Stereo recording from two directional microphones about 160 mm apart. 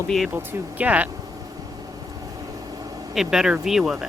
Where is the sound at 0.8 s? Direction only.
10° right (ahead or behind).